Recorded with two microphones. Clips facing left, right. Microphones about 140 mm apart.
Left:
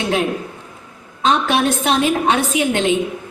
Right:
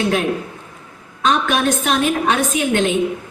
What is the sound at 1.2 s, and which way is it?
A woman's voice, 35° left (ahead or behind).